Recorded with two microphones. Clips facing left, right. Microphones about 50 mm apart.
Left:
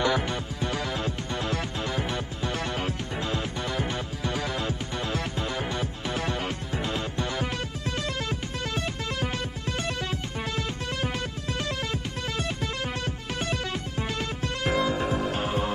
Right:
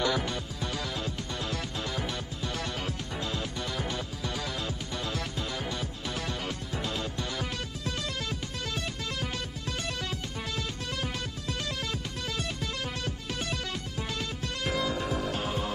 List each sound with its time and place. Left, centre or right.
0.0 s music: left
13.0 s music: left